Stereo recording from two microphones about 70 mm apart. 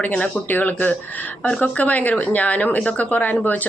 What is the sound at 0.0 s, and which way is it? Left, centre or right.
Speech, left.